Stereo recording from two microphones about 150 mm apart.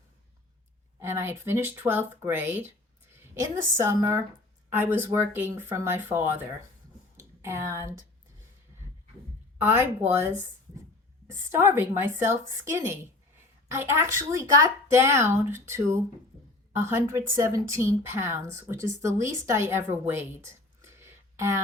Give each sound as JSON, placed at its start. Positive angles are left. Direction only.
{"t": 0.9, "sound": "speech", "side_deg": -15}
{"t": 7.4, "sound": "speech", "side_deg": -20}
{"t": 9.6, "sound": "speech", "side_deg": -15}